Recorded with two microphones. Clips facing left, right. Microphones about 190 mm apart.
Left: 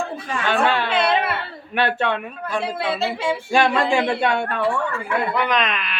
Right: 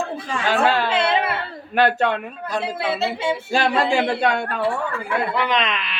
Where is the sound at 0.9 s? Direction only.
25° right (ahead or behind).